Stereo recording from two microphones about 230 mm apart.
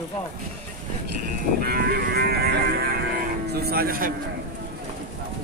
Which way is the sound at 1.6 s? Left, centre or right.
Right.